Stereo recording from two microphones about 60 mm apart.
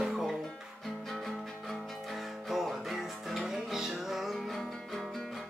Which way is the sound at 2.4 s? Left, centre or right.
Centre.